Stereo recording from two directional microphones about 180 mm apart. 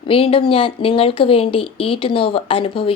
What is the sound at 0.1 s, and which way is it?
Speech, 30° left (ahead or behind).